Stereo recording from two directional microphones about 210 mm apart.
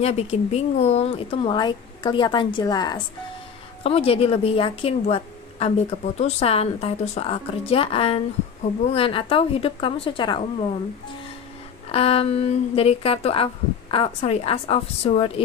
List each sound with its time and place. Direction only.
0.0 s speech: 30° left (ahead or behind)
11.9 s speech: 30° left (ahead or behind)